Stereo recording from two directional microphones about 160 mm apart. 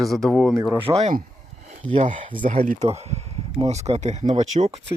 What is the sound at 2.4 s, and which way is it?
Speech, 60° right (ahead or behind).